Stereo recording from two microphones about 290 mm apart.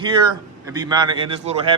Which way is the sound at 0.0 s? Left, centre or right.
Centre.